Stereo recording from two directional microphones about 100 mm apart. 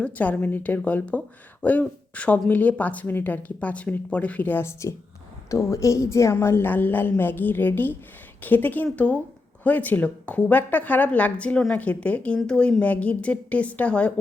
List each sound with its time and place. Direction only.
0.0 s a woman's voice: 15° left (ahead or behind)